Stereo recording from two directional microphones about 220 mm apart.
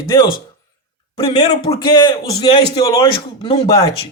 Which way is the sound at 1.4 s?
25° left (ahead or behind).